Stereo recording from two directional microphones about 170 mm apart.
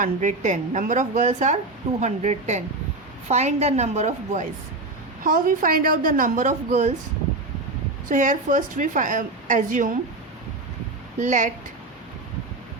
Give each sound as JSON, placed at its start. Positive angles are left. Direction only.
{"t": 0.0, "sound": "a woman's voice", "side_deg": -45}
{"t": 5.2, "sound": "a woman's voice", "side_deg": -55}
{"t": 8.1, "sound": "a woman's voice", "side_deg": -50}
{"t": 11.2, "sound": "a woman's voice", "side_deg": -45}